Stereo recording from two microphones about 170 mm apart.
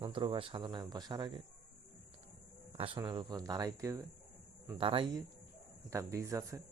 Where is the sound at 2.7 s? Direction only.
30° right (ahead or behind).